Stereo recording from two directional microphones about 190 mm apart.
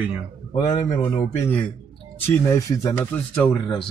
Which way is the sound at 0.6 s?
15° left (ahead or behind).